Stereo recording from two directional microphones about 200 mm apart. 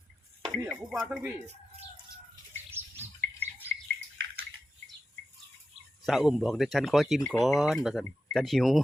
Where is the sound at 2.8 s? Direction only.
10° right (ahead or behind).